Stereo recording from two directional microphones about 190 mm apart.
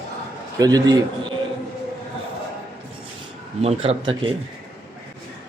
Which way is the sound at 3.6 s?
30° right (ahead or behind).